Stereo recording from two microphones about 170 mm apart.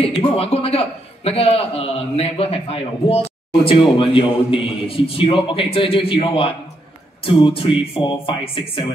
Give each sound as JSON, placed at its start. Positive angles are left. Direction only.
{"t": 0.0, "sound": "a man's voice", "side_deg": 35}